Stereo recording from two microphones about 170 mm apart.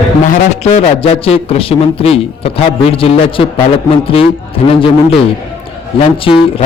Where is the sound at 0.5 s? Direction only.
40° left (ahead or behind).